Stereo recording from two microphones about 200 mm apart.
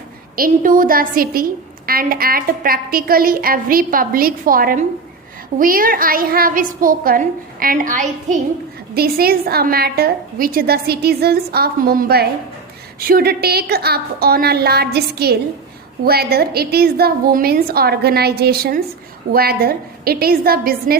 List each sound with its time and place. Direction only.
0.3 s a woman's voice: 45° right (ahead or behind)